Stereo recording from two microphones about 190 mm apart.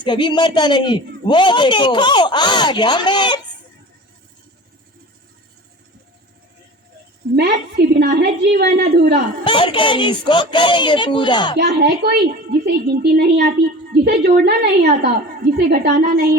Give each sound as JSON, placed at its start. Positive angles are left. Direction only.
{"t": 0.0, "sound": "speech", "side_deg": 25}
{"t": 7.3, "sound": "a woman's voice", "side_deg": -60}
{"t": 9.4, "sound": "speech", "side_deg": 25}
{"t": 11.5, "sound": "a woman's voice", "side_deg": -60}